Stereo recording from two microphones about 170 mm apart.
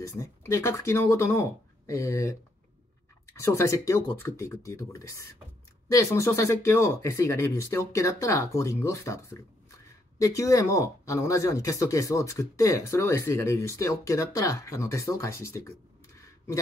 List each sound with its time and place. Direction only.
0.0 s speech: 15° left (ahead or behind)
3.3 s speech: 15° left (ahead or behind)